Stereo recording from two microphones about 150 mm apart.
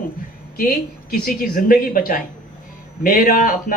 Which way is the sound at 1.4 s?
80° left.